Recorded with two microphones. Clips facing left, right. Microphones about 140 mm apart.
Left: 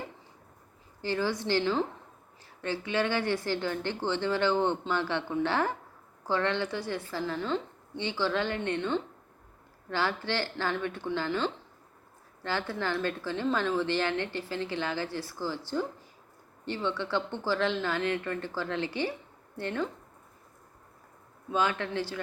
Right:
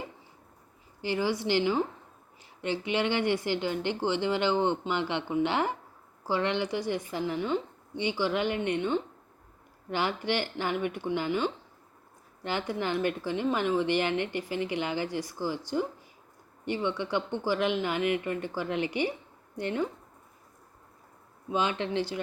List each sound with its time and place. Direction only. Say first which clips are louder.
1.0 s a woman's voice: right 1 dB; 15° right (ahead or behind)
21.5 s speech: right 1 dB; 20° right (ahead or behind)